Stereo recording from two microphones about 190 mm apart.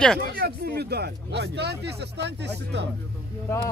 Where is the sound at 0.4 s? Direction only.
55° right (ahead or behind).